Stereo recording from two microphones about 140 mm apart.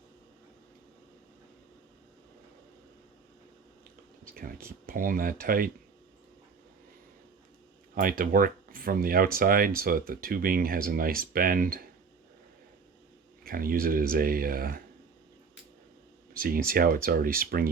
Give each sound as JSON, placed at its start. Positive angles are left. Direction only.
{"t": 4.4, "sound": "speech", "side_deg": -90}
{"t": 7.9, "sound": "speech", "side_deg": -85}
{"t": 13.4, "sound": "speech", "side_deg": -90}
{"t": 16.3, "sound": "speech", "side_deg": -90}